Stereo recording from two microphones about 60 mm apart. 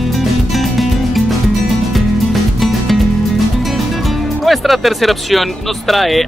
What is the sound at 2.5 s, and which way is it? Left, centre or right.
Music, centre.